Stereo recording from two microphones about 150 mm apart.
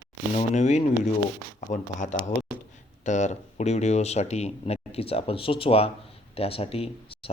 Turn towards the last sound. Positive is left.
turn(degrees=40)  # may be behind; listen again after turning